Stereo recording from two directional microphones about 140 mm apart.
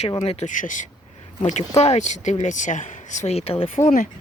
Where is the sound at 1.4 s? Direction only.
55° left (ahead or behind).